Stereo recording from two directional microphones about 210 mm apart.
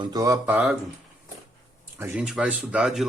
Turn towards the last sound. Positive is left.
turn(degrees=-5)  # may be behind; listen again after turning